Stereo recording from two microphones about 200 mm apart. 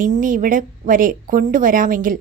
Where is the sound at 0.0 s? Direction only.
40° right (ahead or behind).